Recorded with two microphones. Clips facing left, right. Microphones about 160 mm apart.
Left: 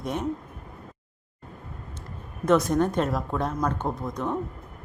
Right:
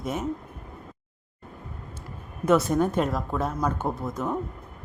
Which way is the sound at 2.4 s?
5° right (ahead or behind).